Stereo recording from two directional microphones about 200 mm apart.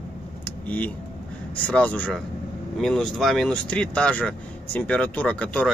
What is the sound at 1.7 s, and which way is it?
Speech, 5° left (ahead or behind).